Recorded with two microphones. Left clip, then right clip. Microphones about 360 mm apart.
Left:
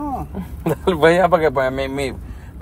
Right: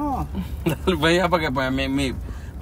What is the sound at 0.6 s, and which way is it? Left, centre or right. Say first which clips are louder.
Speech: left 6 dB; centre.